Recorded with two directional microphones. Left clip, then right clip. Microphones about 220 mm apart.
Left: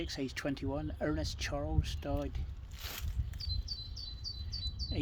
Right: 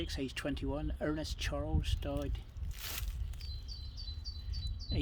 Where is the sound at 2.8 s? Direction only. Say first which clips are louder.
Right 1 dB; 15° right (ahead or behind).